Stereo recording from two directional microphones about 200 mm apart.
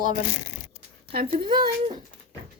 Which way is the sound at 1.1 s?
50° right (ahead or behind).